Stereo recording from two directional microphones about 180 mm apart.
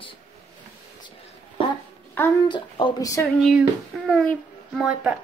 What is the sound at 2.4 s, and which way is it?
Speech, 25° left (ahead or behind).